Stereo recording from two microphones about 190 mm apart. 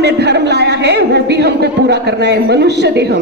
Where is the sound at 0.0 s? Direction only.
60° right (ahead or behind).